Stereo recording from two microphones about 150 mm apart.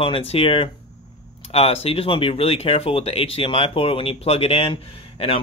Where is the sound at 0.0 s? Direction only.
40° left (ahead or behind).